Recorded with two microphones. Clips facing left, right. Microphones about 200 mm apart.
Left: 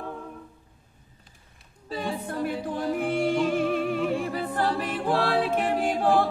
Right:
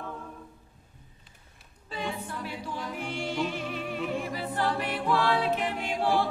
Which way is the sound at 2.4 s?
50° left (ahead or behind).